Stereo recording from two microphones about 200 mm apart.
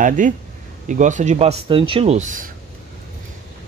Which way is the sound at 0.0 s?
40° right (ahead or behind).